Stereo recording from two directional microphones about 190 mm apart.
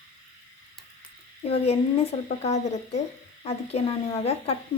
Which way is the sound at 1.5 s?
30° left (ahead or behind).